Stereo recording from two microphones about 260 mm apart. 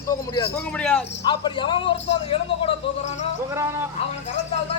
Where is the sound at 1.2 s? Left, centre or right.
Centre.